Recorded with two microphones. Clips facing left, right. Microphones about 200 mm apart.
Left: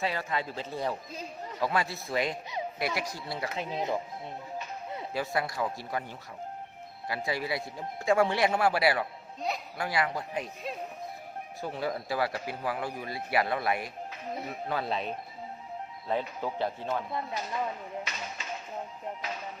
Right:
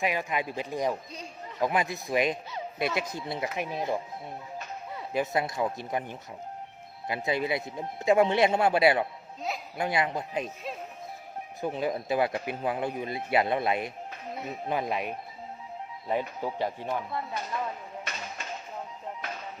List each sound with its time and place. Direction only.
0.0 s a man's voice: 15° right (ahead or behind)
3.7 s speech: 20° left (ahead or behind)
5.1 s a man's voice: 20° right (ahead or behind)
11.6 s a man's voice: 20° right (ahead or behind)
16.9 s speech: 20° left (ahead or behind)